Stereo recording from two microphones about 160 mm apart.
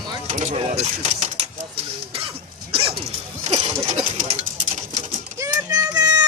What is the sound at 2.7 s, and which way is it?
Dog, 35° right (ahead or behind).